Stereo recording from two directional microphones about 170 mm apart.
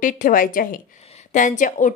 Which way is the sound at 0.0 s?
50° left (ahead or behind).